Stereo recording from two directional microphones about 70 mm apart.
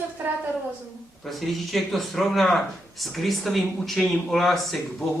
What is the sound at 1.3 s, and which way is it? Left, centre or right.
Speech, centre.